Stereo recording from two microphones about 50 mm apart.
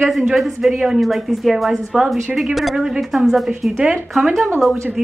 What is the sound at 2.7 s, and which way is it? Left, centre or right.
A woman's voice, centre.